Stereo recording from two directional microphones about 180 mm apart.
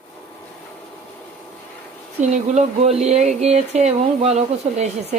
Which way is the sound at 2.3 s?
40° right (ahead or behind).